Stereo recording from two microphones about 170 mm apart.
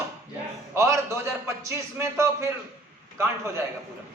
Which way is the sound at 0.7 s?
15° right (ahead or behind).